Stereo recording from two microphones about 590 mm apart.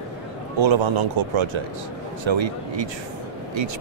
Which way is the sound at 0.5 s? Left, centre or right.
Right.